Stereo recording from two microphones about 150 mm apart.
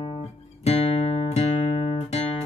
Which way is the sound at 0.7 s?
45° left (ahead or behind).